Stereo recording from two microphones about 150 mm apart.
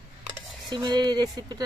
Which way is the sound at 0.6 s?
30° right (ahead or behind).